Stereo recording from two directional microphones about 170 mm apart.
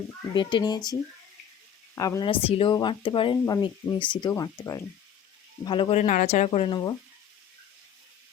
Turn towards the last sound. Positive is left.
turn(degrees=35)  # may be behind; listen again after turning